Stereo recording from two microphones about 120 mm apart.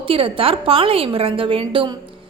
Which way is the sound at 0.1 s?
50° right (ahead or behind).